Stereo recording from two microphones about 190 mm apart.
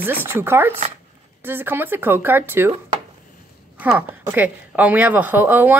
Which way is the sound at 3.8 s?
10° right (ahead or behind).